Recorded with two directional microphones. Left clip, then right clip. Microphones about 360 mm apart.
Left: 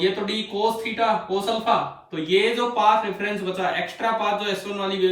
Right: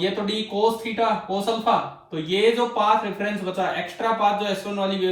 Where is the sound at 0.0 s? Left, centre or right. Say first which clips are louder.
Left 1 dB; centre.